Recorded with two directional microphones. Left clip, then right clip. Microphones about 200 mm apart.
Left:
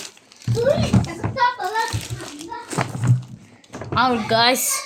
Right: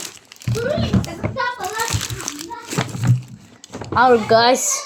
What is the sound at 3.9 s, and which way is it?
Speech, 5° left (ahead or behind).